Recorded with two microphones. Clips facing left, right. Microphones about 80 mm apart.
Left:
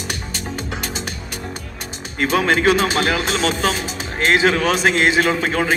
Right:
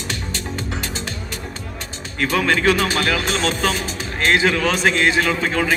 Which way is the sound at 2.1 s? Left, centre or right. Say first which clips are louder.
Left 2 dB; left.